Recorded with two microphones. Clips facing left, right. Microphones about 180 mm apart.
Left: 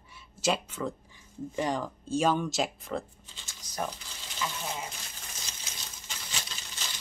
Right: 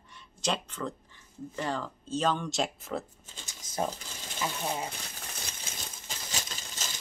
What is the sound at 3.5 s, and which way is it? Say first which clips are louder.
Speech: right 3 dB; 25° right (ahead or behind).